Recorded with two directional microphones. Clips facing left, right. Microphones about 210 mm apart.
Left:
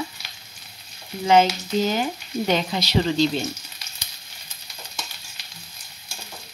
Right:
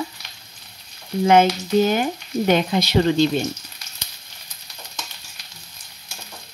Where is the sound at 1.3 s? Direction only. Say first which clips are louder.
Right 2 dB; 55° right (ahead or behind).